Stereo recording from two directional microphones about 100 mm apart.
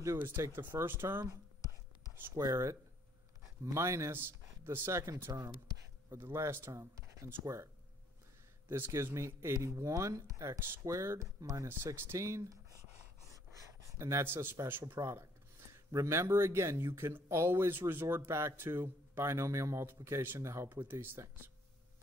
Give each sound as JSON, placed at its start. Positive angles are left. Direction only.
{"t": 0.0, "sound": "speech", "side_deg": -30}
{"t": 8.6, "sound": "speech", "side_deg": -25}
{"t": 13.3, "sound": "a sound", "side_deg": -30}
{"t": 15.0, "sound": "speech", "side_deg": -30}